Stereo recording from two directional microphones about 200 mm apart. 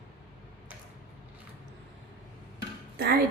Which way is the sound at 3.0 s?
50° right (ahead or behind).